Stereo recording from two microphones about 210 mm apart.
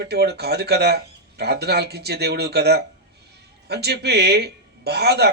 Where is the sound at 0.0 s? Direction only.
50° right (ahead or behind).